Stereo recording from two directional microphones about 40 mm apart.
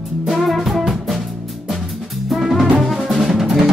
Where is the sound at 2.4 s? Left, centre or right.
Centre.